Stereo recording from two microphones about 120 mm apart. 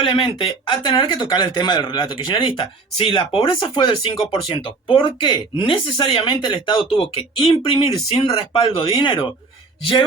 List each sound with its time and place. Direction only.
0.0 s speech: 45° left (ahead or behind)